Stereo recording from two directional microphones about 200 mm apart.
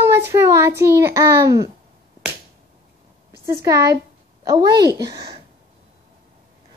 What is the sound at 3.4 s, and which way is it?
A woman's voice, 15° right (ahead or behind).